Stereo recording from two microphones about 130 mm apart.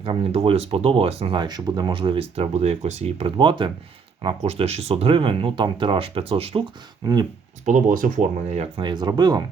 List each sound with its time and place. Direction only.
0.0 s speech: 45° right (ahead or behind)
7.0 s speech: 30° right (ahead or behind)
7.6 s speech: 80° right
8.7 s speech: 35° right (ahead or behind)